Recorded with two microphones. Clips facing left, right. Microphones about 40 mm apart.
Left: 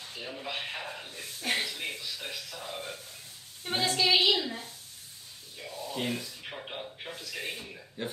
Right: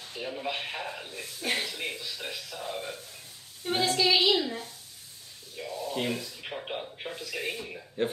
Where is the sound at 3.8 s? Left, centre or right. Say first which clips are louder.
Even; left.